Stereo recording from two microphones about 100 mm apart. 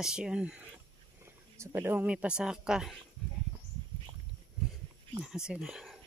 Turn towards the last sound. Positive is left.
turn(degrees=-5)  # may be behind; listen again after turning